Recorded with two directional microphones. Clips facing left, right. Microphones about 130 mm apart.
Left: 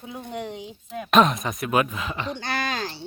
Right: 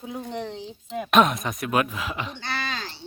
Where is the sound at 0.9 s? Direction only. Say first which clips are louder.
Left 1 dB; centre (ahead or behind).